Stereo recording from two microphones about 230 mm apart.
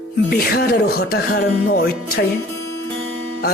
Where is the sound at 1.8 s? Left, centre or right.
Left.